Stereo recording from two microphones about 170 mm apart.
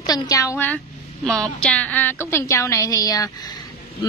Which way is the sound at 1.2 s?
5° left (ahead or behind).